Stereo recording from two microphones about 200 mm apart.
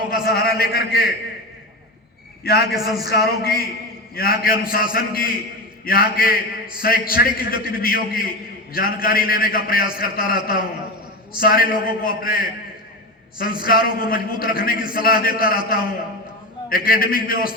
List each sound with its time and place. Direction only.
0.3 s a man's voice: 50° left (ahead or behind)
2.4 s a man's voice: 50° left (ahead or behind)